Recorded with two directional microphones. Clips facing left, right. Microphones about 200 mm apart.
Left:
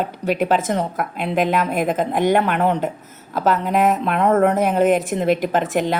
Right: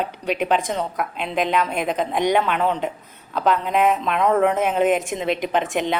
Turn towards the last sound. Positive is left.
turn(degrees=0)  # may be behind; listen again after turning